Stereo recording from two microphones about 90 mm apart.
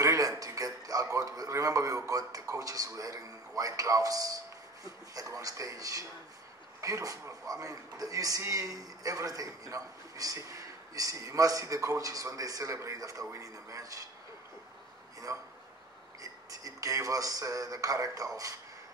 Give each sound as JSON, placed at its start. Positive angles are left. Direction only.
{"t": 0.0, "sound": "a man's voice", "side_deg": -40}
{"t": 15.3, "sound": "a man's voice", "side_deg": -40}